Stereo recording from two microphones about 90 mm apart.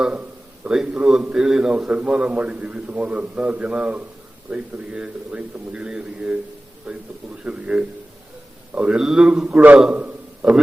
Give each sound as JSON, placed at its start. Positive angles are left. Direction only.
{"t": 0.0, "sound": "a man's voice", "side_deg": -15}